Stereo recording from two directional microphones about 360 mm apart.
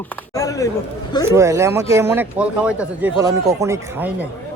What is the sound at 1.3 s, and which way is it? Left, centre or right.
Speech, centre.